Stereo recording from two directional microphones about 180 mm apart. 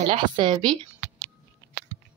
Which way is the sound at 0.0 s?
25° right (ahead or behind).